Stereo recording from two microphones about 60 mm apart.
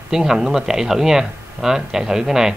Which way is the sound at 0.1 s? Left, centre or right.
Centre.